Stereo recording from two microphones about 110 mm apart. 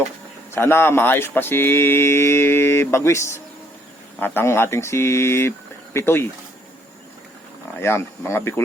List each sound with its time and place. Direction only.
0.5 s speech: 20° left (ahead or behind)
7.8 s speech: 20° left (ahead or behind)